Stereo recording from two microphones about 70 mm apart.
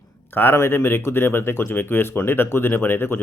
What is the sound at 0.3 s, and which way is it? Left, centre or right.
Speech, left.